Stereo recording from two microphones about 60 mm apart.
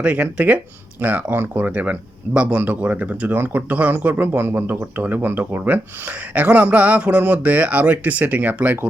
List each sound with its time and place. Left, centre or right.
0.0 s speech: right